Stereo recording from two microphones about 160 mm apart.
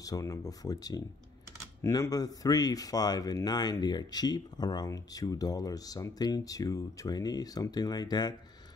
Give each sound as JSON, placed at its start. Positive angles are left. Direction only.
{"t": 0.0, "sound": "speech", "side_deg": 20}